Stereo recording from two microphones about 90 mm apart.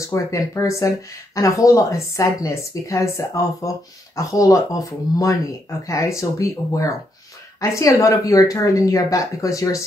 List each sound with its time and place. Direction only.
0.0 s speech: 35° left (ahead or behind)